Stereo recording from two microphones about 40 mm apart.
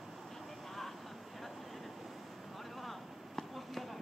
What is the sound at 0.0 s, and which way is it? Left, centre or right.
Vehicle, centre.